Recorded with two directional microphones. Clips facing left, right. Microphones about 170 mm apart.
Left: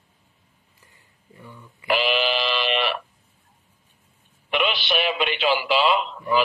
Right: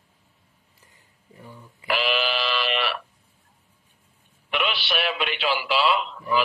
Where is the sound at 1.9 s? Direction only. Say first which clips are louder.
Left 3 dB; centre (ahead or behind).